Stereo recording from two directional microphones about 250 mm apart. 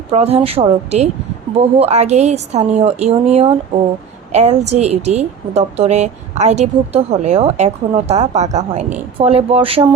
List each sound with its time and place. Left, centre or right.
0.1 s a woman's voice: right